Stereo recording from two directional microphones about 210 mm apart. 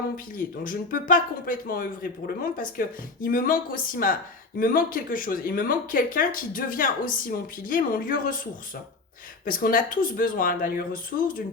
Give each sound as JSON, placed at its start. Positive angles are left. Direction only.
{"t": 0.3, "sound": "speech", "side_deg": 40}
{"t": 9.5, "sound": "speech", "side_deg": 40}